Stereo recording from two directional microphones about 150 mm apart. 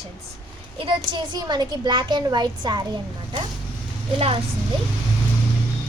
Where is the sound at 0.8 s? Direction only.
35° right (ahead or behind).